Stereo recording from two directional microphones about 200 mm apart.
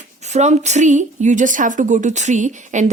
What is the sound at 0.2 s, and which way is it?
A woman's voice, 35° right (ahead or behind).